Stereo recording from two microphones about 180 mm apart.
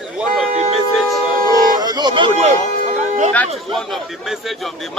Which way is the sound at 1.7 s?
25° right (ahead or behind).